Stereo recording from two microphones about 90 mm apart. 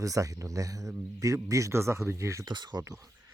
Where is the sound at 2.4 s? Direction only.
55° right (ahead or behind).